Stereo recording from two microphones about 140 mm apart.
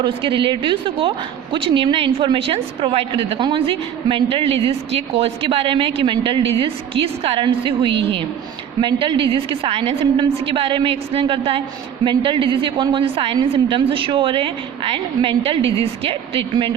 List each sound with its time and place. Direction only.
0.0 s a woman's voice: 35° right (ahead or behind)